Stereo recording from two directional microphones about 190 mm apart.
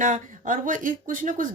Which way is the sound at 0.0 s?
45° right (ahead or behind).